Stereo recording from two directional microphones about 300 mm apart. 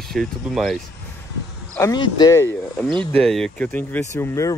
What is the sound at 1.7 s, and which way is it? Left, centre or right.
Speech, centre.